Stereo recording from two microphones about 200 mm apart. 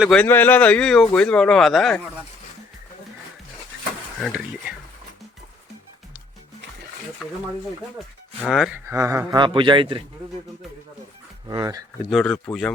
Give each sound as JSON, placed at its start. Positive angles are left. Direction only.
{"t": 0.0, "sound": "speech", "side_deg": 5}
{"t": 4.2, "sound": "speech", "side_deg": -5}
{"t": 8.4, "sound": "speech", "side_deg": 0}
{"t": 8.9, "sound": "a man's voice", "side_deg": -15}
{"t": 11.4, "sound": "speech", "side_deg": -20}
{"t": 12.0, "sound": "speech", "side_deg": 0}